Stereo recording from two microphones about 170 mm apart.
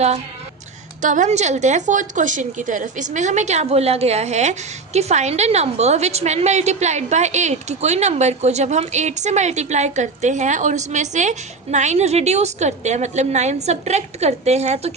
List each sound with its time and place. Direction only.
1.0 s a woman's voice: 45° right (ahead or behind)